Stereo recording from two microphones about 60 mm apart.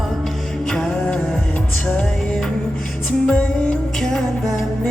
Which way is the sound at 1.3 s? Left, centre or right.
Left.